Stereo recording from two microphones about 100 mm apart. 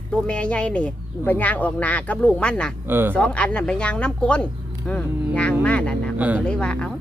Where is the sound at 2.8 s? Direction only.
20° right (ahead or behind).